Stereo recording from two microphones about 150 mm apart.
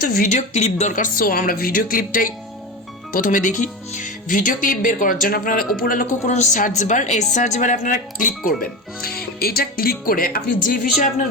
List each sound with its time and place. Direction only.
0.0 s speech: 65° left (ahead or behind)
9.0 s speech: 90° left; by 11.1 s 65° left (ahead or behind)